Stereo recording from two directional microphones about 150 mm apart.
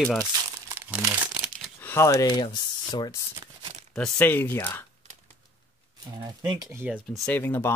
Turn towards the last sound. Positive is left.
turn(degrees=15)  # may be behind; listen again after turning